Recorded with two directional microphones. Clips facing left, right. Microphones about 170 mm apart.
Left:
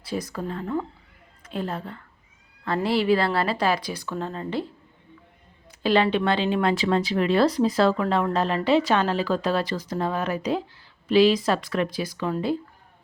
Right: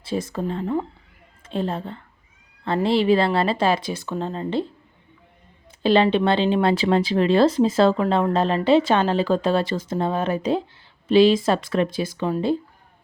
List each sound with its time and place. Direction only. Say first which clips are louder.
0.0 s speech: right 4 dB; 25° right (ahead or behind)
5.8 s speech: right 3 dB; 25° right (ahead or behind)